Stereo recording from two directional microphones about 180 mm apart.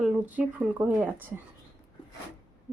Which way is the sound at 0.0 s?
10° right (ahead or behind).